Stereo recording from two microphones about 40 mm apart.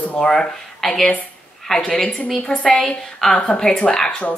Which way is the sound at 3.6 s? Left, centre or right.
Centre.